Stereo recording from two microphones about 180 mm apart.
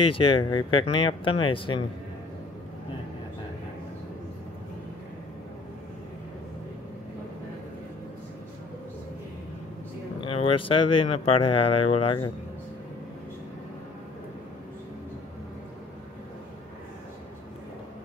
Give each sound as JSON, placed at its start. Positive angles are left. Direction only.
{"t": 0.0, "sound": "speech", "side_deg": 30}
{"t": 10.2, "sound": "speech", "side_deg": 30}